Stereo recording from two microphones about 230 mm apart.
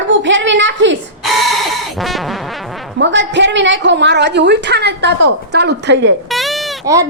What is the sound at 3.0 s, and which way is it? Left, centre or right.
A woman's voice, right.